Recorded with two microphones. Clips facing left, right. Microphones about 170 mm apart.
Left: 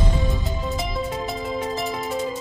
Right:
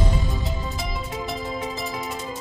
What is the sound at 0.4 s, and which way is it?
Music, centre (ahead or behind).